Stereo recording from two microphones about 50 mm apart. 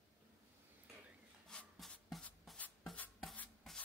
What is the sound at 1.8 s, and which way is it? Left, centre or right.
Writing, centre.